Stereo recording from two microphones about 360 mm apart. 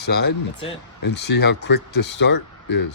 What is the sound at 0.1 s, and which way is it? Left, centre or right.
Speech, left.